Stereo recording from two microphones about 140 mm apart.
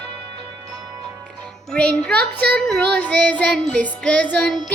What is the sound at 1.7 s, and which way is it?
Child singing, 10° left (ahead or behind).